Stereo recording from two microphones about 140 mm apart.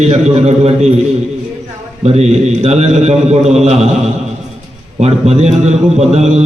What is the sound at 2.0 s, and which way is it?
A man's voice, 50° right (ahead or behind).